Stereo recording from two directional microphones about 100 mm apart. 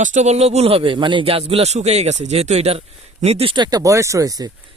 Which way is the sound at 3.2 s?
80° right.